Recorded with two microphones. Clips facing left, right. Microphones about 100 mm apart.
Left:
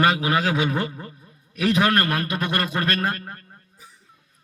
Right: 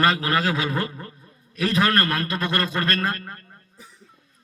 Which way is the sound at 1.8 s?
20° left (ahead or behind).